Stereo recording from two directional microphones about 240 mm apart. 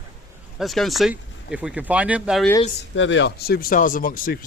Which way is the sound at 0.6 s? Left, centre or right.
Centre.